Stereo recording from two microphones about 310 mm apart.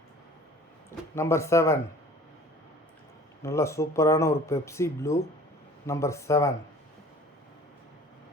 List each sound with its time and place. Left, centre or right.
1.1 s speech: centre
3.4 s speech: centre